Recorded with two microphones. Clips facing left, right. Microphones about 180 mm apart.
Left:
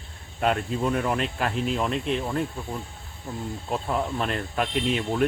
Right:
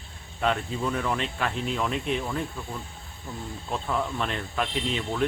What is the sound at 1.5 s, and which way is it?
Speech, centre (ahead or behind).